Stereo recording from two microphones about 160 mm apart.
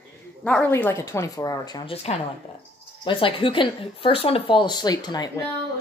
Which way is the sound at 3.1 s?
35° left (ahead or behind).